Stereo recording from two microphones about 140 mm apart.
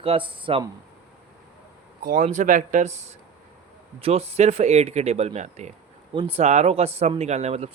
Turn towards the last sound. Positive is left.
turn(degrees=-50)  # may be behind; listen again after turning